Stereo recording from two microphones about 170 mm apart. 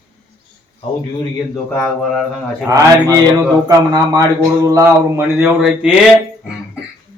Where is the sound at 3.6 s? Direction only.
25° right (ahead or behind); by 5.9 s 5° right (ahead or behind).